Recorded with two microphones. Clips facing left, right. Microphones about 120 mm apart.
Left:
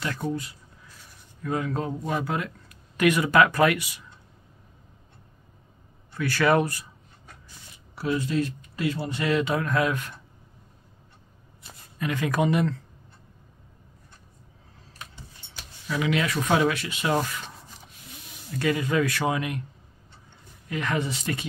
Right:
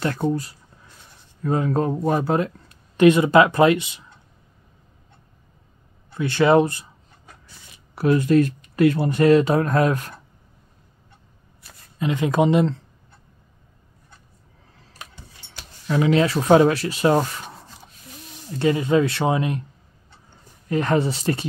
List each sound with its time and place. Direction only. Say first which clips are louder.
0.0 s speech: right 7 dB; 40° right (ahead or behind)
6.1 s speech: right 6 dB; 25° right (ahead or behind)
7.9 s speech: right 9 dB; 55° right (ahead or behind)
9.2 s speech: right 9 dB; 40° right (ahead or behind)
12.0 s speech: right 5 dB; 25° right (ahead or behind)
15.9 s speech: right 7 dB; 35° right (ahead or behind)
18.5 s speech: right 6 dB; 30° right (ahead or behind)
20.6 s speech: right 8 dB; 35° right (ahead or behind)